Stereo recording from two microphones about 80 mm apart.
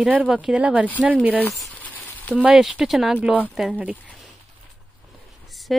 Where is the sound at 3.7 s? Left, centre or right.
Centre.